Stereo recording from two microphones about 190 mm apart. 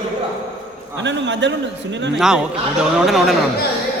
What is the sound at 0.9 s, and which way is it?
A man's voice, 70° right (ahead or behind).